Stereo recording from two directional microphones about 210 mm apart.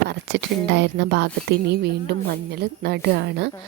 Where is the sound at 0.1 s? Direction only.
55° right (ahead or behind).